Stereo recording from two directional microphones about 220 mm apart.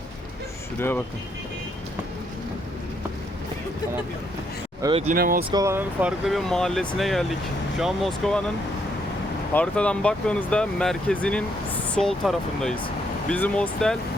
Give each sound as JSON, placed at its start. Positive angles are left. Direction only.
{"t": 0.8, "sound": "speech", "side_deg": 10}
{"t": 4.8, "sound": "speech", "side_deg": -25}
{"t": 5.1, "sound": "speech", "side_deg": -45}
{"t": 5.5, "sound": "speech", "side_deg": -15}